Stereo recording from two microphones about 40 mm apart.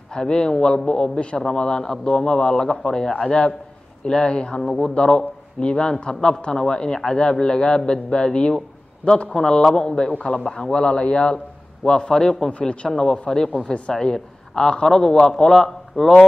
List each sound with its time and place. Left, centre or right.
0.1 s a man's voice: centre
12.4 s a man's voice: left
12.8 s a man's voice: centre